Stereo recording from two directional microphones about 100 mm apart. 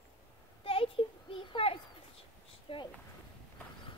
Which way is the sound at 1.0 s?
65° left (ahead or behind).